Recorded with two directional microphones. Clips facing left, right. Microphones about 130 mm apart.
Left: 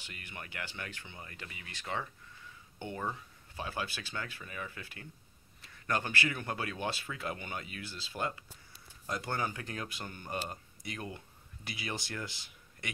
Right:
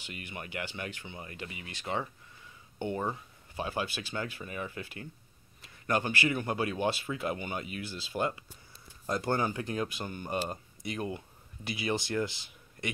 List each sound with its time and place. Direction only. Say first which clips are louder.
0.0 s speech: right 5 dB; 15° right (ahead or behind)
9.0 s speech: right 6 dB; 35° right (ahead or behind)